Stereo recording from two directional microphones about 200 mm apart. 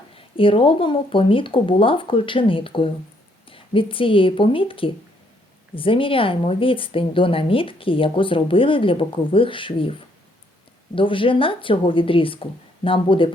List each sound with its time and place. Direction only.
0.2 s speech: 25° left (ahead or behind)
10.9 s speech: 25° left (ahead or behind)